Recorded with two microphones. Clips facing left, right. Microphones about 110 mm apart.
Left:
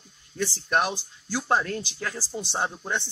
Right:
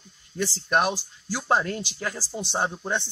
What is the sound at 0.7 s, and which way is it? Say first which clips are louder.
Speech: right 2 dB; 15° right (ahead or behind).